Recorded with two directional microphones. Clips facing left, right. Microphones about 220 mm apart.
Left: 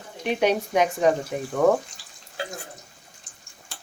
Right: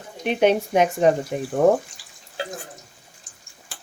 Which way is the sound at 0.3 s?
25° right (ahead or behind).